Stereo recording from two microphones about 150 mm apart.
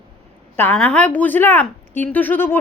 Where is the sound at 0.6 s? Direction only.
10° left (ahead or behind).